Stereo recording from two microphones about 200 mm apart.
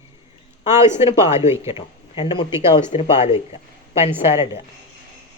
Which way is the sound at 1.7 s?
25° left (ahead or behind).